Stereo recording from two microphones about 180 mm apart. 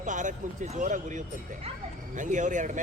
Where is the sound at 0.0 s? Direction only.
45° right (ahead or behind).